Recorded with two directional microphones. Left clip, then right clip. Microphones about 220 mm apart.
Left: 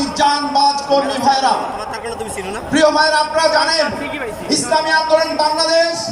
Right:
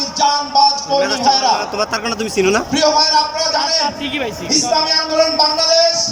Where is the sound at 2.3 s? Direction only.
45° right (ahead or behind).